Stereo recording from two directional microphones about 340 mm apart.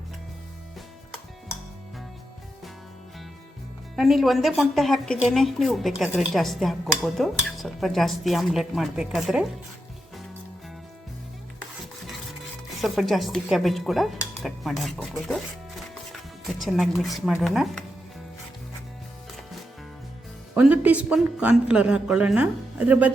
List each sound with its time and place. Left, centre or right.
3.9 s a woman's voice: centre
12.8 s a woman's voice: centre
16.4 s a woman's voice: centre
20.6 s a woman's voice: centre